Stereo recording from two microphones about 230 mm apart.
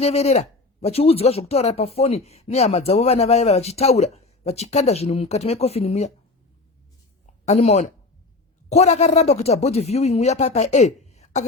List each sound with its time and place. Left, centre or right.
0.0 s speech: left
7.4 s a woman's voice: left